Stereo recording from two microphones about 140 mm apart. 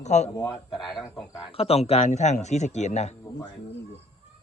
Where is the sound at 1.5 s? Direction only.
45° left (ahead or behind).